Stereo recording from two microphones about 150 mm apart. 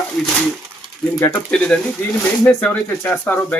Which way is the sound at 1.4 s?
5° left (ahead or behind).